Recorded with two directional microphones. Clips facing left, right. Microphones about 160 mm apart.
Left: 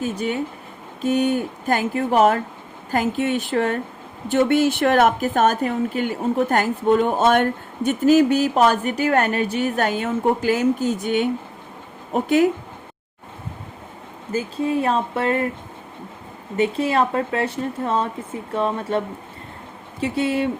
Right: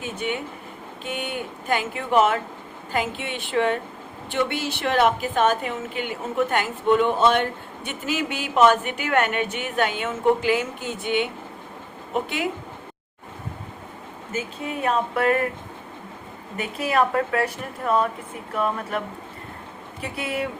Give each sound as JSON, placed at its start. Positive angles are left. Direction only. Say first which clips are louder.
{"t": 0.0, "sound": "a woman's voice", "louder": "left 5 dB", "side_deg": 35}
{"t": 14.3, "sound": "a woman's voice", "louder": "left 8 dB", "side_deg": 30}
{"t": 16.6, "sound": "speech", "louder": "left 4 dB", "side_deg": 25}